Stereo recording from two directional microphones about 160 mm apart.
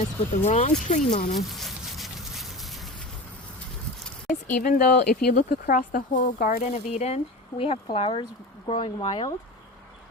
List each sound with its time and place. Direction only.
0.0 s speech: 40° left (ahead or behind)
1.5 s insect: centre (ahead or behind)
4.4 s speech: 55° left (ahead or behind); by 9.2 s 35° left (ahead or behind)